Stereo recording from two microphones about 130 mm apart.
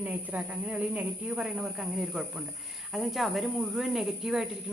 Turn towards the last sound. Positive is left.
turn(degrees=-5)  # may be behind; listen again after turning